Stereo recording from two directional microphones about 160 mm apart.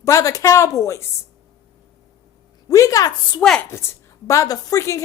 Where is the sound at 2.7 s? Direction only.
20° left (ahead or behind).